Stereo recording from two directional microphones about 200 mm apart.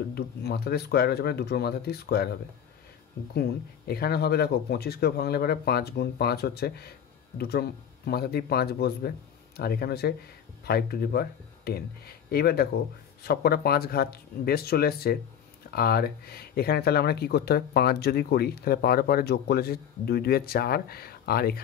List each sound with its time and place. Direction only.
0.1 s speech: 55° left (ahead or behind)
3.3 s speech: 50° left (ahead or behind)